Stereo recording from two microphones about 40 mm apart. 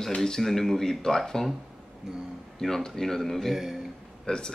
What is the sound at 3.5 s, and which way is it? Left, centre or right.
Speech, centre.